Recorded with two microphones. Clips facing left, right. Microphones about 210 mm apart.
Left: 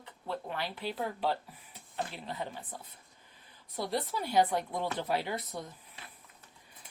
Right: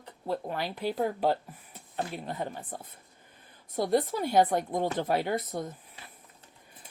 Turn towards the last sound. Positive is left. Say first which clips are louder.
# right 6 dB
turn(degrees=-50)  # may be behind; listen again after turning